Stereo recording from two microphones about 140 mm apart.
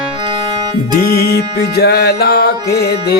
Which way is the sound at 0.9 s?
90° left.